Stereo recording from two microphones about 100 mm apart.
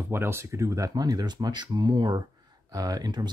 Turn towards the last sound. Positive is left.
turn(degrees=-45)  # may be behind; listen again after turning